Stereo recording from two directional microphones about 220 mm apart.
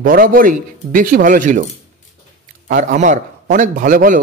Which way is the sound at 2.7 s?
35° right (ahead or behind).